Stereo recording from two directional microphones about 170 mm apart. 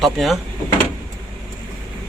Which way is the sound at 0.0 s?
Centre (ahead or behind).